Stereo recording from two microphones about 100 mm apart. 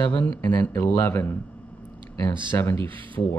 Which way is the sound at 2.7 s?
60° right (ahead or behind).